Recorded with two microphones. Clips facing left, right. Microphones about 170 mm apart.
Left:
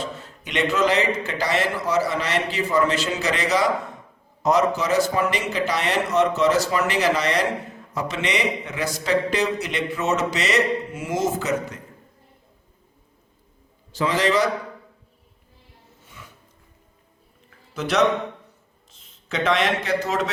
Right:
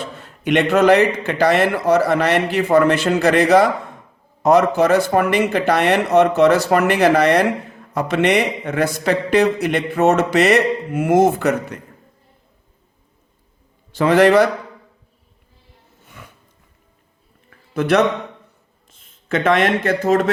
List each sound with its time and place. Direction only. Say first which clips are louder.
0.0 s a man's voice: right 6 dB; 60° right (ahead or behind)
13.9 s a man's voice: right 9 dB; 60° right (ahead or behind)
16.0 s music: right 4 dB; 55° right (ahead or behind)
17.7 s a man's voice: right 4 dB; 55° right (ahead or behind)